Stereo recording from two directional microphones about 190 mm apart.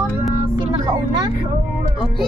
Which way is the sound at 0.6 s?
25° right (ahead or behind).